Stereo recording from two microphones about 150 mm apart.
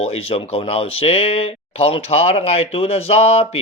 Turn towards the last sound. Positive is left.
turn(degrees=40)  # may be behind; listen again after turning